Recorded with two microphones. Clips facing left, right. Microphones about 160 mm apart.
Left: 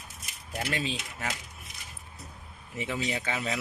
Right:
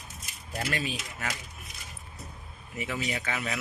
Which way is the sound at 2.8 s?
25° left (ahead or behind).